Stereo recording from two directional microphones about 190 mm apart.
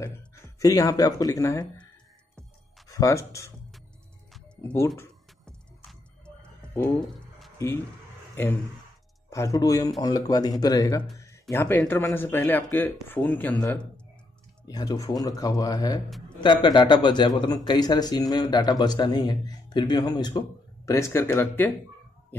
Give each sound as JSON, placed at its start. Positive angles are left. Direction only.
{"t": 0.0, "sound": "speech", "side_deg": 20}
{"t": 3.0, "sound": "speech", "side_deg": 15}
{"t": 4.3, "sound": "music", "side_deg": 5}
{"t": 7.5, "sound": "speech", "side_deg": 15}
{"t": 9.3, "sound": "speech", "side_deg": 15}
{"t": 14.7, "sound": "speech", "side_deg": 20}